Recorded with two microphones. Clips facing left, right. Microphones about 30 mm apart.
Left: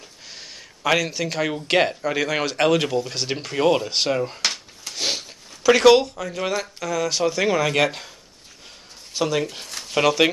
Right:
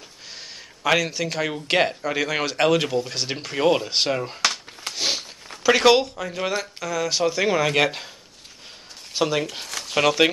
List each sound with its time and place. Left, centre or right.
0.8 s speech: centre
4.9 s a sound: centre
5.6 s speech: centre
9.1 s speech: centre
9.7 s a sound: right
9.9 s speech: centre